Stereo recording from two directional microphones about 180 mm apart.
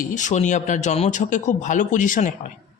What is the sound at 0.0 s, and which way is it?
A man's voice, 45° left (ahead or behind).